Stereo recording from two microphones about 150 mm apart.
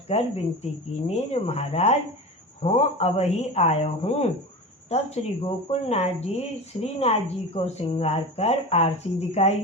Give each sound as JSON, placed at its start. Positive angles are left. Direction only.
{"t": 0.1, "sound": "a woman's voice", "side_deg": 45}